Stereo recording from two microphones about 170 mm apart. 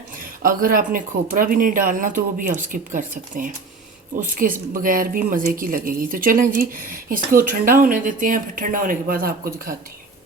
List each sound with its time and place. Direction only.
0.4 s speech: 55° right (ahead or behind)